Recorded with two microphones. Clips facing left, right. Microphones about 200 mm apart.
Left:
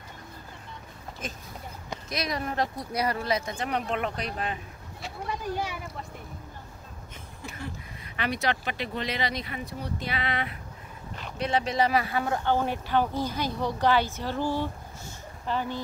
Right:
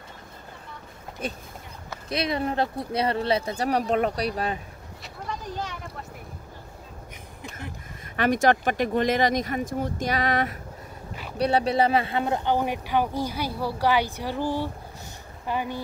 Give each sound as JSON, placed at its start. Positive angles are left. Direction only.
{"t": 2.0, "sound": "speech", "side_deg": -30}
{"t": 5.3, "sound": "speech", "side_deg": 10}
{"t": 8.2, "sound": "speech", "side_deg": -45}